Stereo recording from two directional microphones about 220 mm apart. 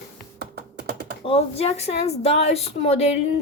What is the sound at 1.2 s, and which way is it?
A woman's voice, 25° left (ahead or behind).